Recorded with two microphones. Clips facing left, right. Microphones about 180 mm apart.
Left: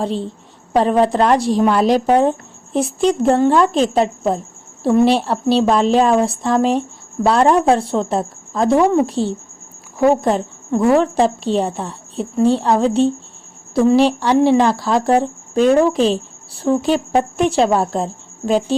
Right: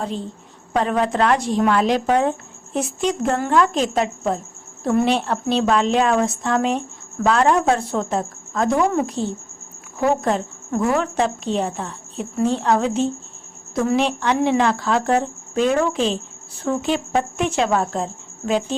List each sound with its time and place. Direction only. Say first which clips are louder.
0.0 s a woman's voice: left 5 dB; 30° left (ahead or behind)
10.7 s a woman's voice: left 6 dB; 30° left (ahead or behind)